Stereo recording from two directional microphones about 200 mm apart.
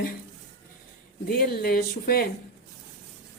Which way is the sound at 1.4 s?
50° left (ahead or behind).